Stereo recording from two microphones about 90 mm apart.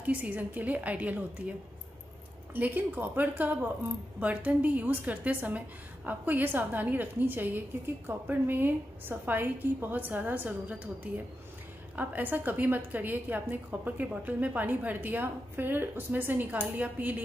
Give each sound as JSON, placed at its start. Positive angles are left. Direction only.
{"t": 0.0, "sound": "a woman's voice", "side_deg": -20}
{"t": 2.5, "sound": "a woman's voice", "side_deg": -20}